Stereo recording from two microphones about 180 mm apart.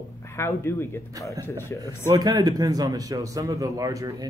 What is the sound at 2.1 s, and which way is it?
A man's voice, 20° right (ahead or behind).